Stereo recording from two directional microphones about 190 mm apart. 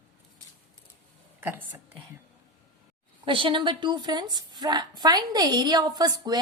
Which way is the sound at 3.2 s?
25° right (ahead or behind).